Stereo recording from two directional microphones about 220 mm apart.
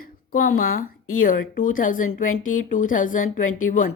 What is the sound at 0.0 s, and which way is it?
Speech, 40° left (ahead or behind).